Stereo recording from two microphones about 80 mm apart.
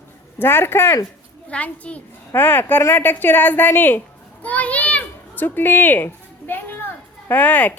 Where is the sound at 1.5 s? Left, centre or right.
Centre.